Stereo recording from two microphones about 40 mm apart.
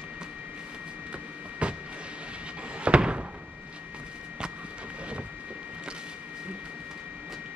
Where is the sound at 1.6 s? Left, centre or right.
Right.